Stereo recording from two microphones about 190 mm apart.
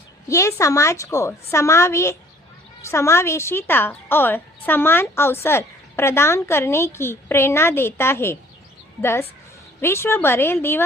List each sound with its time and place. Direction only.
0.3 s a woman's voice: 15° left (ahead or behind)